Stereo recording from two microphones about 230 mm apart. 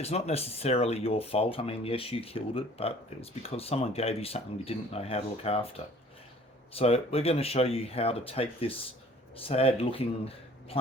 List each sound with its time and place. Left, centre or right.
0.0 s speech: left